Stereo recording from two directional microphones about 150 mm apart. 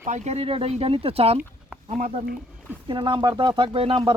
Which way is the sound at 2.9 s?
30° right (ahead or behind).